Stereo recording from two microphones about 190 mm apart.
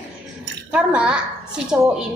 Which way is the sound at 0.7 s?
5° right (ahead or behind).